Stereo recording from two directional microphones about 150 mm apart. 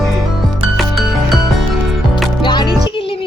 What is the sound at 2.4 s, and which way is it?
Music, 30° left (ahead or behind).